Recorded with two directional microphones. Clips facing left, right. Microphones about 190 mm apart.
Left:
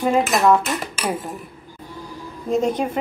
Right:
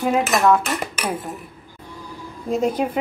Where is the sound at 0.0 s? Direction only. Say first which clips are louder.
Left 1 dB; 5° right (ahead or behind).